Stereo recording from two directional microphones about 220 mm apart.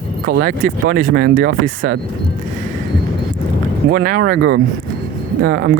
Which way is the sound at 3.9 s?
40° right (ahead or behind).